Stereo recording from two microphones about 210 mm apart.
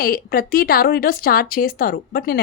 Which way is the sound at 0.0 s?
45° left (ahead or behind).